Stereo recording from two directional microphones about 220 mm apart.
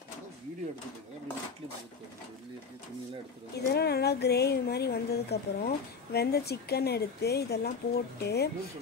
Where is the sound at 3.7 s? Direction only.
45° left (ahead or behind).